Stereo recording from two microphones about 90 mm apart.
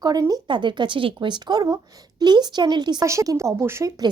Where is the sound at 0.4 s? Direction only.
60° right (ahead or behind).